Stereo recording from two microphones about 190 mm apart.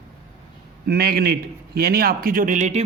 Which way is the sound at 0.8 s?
55° right (ahead or behind).